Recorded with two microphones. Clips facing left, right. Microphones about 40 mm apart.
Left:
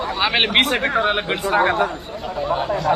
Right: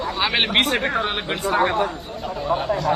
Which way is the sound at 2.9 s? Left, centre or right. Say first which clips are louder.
Left 4 dB; centre.